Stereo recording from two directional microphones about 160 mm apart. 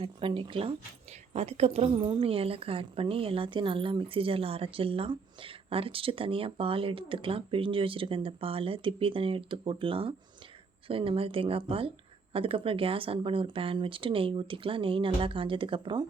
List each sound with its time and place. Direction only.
0.0 s a woman's voice: 35° right (ahead or behind)